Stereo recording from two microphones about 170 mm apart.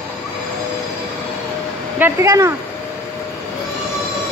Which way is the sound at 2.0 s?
20° right (ahead or behind).